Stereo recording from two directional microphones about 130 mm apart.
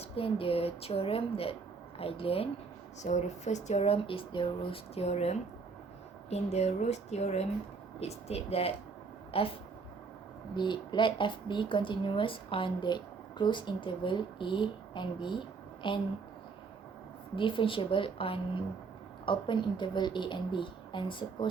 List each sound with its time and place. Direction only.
0.0 s speech: 45° left (ahead or behind)
3.0 s speech: 65° left (ahead or behind); by 9.5 s 45° left (ahead or behind)
10.5 s speech: 35° left (ahead or behind)
17.3 s speech: 40° left (ahead or behind)